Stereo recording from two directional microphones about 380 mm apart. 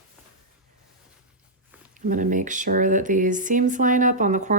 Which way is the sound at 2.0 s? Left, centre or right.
Right.